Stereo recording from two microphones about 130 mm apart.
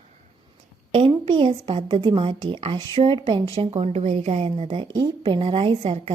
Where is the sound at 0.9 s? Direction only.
45° right (ahead or behind).